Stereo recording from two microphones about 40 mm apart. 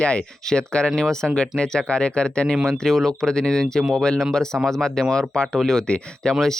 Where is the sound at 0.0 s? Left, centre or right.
Left.